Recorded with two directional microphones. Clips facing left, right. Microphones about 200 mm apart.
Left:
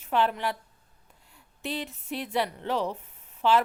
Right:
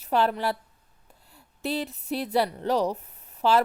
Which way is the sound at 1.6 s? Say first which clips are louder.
Right 4 dB; 40° right (ahead or behind).